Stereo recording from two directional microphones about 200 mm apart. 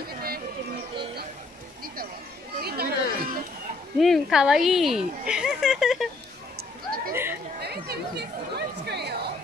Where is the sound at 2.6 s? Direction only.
50° right (ahead or behind).